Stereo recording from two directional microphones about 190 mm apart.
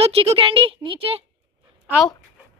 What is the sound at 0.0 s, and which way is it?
Speech, 30° right (ahead or behind).